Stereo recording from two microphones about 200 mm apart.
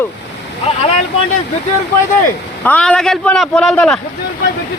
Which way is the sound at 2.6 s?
5° left (ahead or behind).